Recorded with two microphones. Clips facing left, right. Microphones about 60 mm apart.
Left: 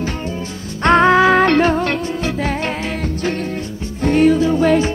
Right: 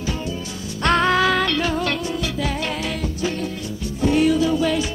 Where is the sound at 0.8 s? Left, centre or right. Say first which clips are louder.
Left 6 dB; left.